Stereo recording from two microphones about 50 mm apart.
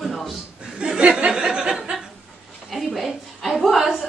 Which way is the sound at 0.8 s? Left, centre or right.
Right.